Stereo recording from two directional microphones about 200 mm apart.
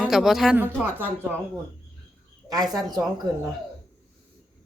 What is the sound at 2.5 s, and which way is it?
Speech, 20° right (ahead or behind).